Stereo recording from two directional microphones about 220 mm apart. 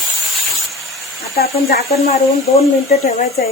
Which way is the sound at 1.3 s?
45° left (ahead or behind).